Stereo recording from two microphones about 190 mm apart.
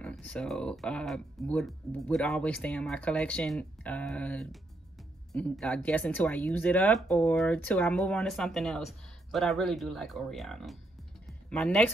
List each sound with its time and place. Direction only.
0.0 s speech: 5° left (ahead or behind)